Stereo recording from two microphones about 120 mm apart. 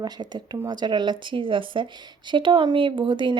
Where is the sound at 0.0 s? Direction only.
35° right (ahead or behind).